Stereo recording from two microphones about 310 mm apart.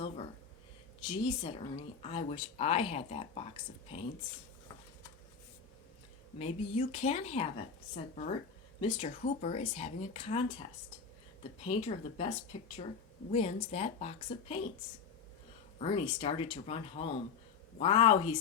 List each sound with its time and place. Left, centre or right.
1.0 s speech: centre
6.4 s speech: centre
11.6 s speech: centre
15.8 s speech: centre